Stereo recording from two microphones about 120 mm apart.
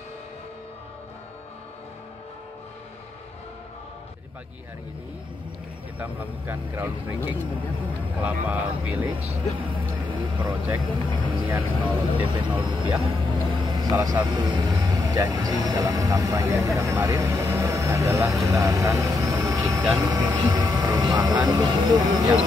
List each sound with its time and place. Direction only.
5.9 s speech: 15° right (ahead or behind)
9.7 s speech: 45° right (ahead or behind)
11.4 s speech: 15° right (ahead or behind)
12.3 s speech: 45° right (ahead or behind)
13.0 s vehicle: 40° right (ahead or behind)
14.0 s speech: 35° right (ahead or behind)